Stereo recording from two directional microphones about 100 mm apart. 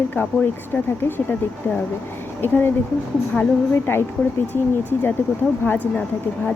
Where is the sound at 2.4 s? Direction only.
20° left (ahead or behind).